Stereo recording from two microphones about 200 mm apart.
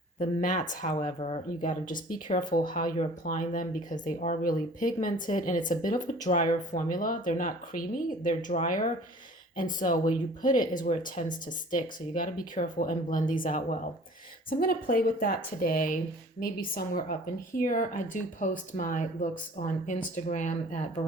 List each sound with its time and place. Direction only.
0.2 s speech: 40° left (ahead or behind)